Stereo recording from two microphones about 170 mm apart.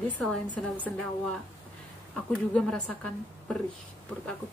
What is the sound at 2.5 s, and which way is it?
Speech, 5° left (ahead or behind).